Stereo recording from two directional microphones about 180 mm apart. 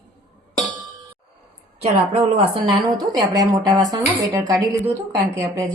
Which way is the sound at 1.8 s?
30° right (ahead or behind).